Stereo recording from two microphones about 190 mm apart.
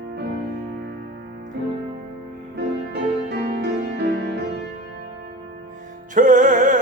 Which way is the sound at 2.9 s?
55° right (ahead or behind).